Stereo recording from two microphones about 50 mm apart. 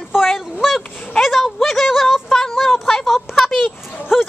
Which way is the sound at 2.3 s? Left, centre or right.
Centre.